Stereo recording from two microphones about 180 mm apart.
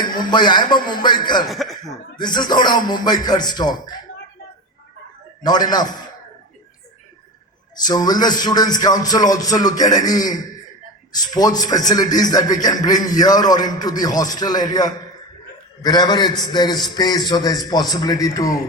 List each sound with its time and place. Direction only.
0.2 s a man's voice: 25° left (ahead or behind)
1.5 s speech: centre (ahead or behind)
2.1 s a man's voice: 25° left (ahead or behind)
5.4 s a man's voice: 20° left (ahead or behind)
7.9 s a man's voice: 20° left (ahead or behind)